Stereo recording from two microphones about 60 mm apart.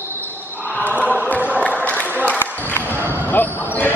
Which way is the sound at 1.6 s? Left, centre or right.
Left.